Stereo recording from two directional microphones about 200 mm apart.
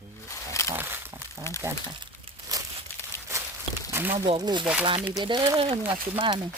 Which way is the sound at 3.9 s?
10° right (ahead or behind).